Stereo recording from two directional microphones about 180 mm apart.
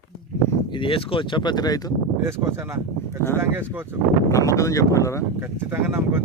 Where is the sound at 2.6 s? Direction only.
15° right (ahead or behind).